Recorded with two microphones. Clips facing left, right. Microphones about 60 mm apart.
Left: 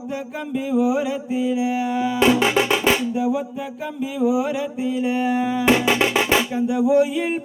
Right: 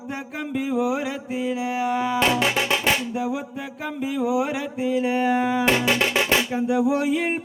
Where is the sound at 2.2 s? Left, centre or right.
Centre.